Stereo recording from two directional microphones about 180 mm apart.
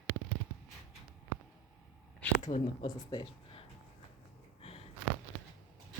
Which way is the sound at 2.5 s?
50° left (ahead or behind).